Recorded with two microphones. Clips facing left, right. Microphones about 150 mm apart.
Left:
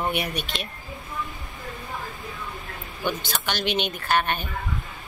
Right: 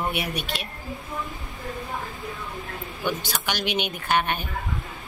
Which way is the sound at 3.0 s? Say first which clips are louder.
Even; 10° right (ahead or behind).